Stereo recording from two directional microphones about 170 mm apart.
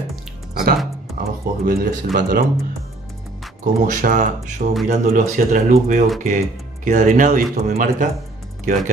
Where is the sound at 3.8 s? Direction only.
50° right (ahead or behind).